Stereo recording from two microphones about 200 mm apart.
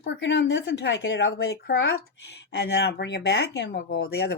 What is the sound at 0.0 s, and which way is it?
Speech, 65° left (ahead or behind).